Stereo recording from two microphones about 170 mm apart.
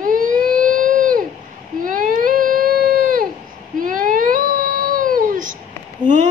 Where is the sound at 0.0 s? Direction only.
55° right (ahead or behind).